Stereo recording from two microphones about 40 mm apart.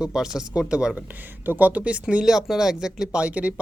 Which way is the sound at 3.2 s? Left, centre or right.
Right.